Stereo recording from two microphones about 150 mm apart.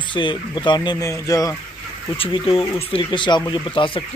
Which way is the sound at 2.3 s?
40° left (ahead or behind).